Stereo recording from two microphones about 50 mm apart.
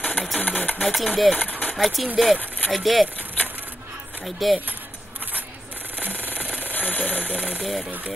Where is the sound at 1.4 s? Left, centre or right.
Left.